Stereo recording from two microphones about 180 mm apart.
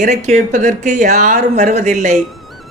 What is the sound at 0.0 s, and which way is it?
Speech, 40° right (ahead or behind).